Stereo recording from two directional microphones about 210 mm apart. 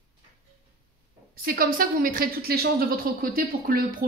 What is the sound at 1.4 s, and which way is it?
A woman's voice, 45° right (ahead or behind).